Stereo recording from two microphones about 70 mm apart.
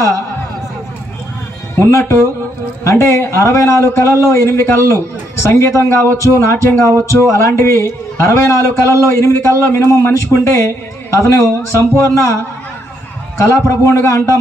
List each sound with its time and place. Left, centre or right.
1.8 s a man's voice: left
13.4 s a man's voice: left